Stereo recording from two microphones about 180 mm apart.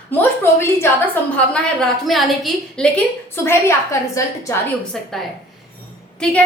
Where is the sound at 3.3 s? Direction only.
15° left (ahead or behind).